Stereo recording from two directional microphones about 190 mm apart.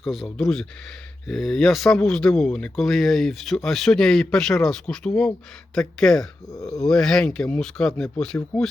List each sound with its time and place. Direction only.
0.0 s speech: centre (ahead or behind)
6.5 s a sound: 20° left (ahead or behind)
6.8 s speech: 5° left (ahead or behind)